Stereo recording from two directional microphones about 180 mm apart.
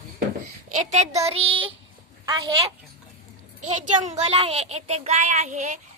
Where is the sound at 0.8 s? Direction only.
40° right (ahead or behind).